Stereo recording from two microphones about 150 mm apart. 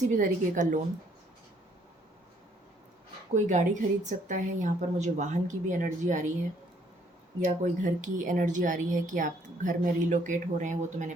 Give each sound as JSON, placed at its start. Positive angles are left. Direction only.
{"t": 0.2, "sound": "a woman's voice", "side_deg": -60}
{"t": 3.3, "sound": "a woman's voice", "side_deg": -55}
{"t": 7.4, "sound": "a woman's voice", "side_deg": -55}